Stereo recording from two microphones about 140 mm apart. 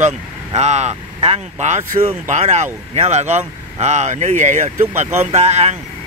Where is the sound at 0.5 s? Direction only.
55° right (ahead or behind).